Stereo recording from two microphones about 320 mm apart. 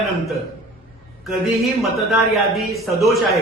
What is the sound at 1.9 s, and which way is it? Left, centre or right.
A man's voice, centre.